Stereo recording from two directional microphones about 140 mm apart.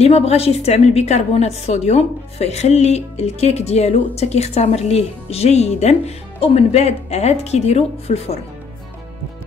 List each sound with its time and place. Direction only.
0.0 s a woman's voice: 50° left (ahead or behind)